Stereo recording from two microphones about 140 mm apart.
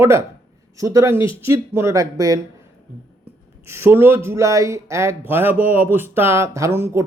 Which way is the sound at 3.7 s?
15° right (ahead or behind).